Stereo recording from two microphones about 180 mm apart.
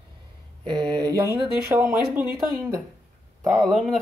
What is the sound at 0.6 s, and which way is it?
Speech, 25° right (ahead or behind).